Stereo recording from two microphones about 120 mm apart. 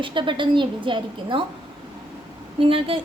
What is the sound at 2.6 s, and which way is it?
Speech, 50° right (ahead or behind).